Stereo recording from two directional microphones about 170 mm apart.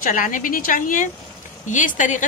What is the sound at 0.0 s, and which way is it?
A woman's voice, 55° left (ahead or behind).